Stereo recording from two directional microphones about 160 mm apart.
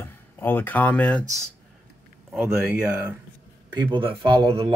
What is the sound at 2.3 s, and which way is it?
Speech, 5° right (ahead or behind).